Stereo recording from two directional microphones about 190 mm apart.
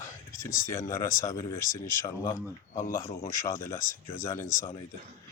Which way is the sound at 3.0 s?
30° left (ahead or behind).